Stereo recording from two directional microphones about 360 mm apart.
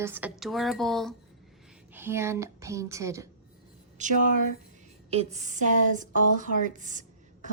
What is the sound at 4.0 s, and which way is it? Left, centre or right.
A woman's voice, centre.